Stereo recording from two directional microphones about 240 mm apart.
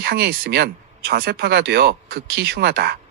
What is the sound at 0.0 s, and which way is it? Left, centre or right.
Speech, right.